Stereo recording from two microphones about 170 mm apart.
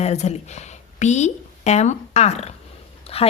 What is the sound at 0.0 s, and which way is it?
A woman's voice, 40° left (ahead or behind).